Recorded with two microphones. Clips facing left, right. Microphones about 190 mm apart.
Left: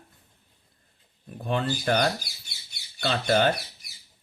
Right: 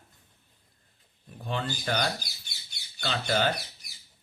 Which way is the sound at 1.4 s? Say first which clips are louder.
Left 6 dB; 55° left (ahead or behind).